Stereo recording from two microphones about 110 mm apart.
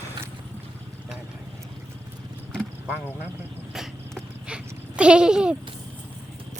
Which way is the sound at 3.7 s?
5° right (ahead or behind).